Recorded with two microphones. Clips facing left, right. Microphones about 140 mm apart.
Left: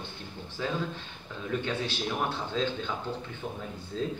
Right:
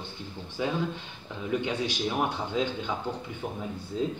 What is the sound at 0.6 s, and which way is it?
A man's voice, 15° right (ahead or behind).